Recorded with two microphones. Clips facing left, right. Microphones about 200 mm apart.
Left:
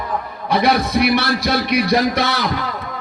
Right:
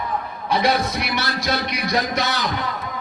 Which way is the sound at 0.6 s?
60° left (ahead or behind).